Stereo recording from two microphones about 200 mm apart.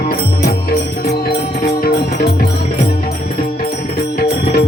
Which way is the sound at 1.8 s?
50° left (ahead or behind).